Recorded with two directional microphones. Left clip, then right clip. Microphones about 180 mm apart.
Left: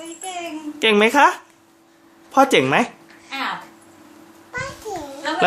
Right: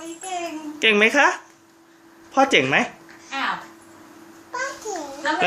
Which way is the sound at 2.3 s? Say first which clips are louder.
Left 2 dB; 30° left (ahead or behind).